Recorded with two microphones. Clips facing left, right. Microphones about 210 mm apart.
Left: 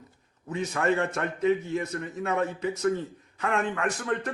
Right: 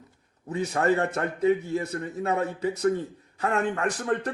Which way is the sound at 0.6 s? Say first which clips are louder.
Right 2 dB; 35° right (ahead or behind).